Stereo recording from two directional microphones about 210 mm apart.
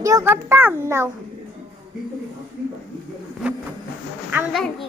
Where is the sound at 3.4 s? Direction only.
5° right (ahead or behind).